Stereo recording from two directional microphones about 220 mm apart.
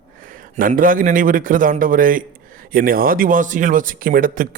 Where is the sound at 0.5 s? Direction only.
35° right (ahead or behind).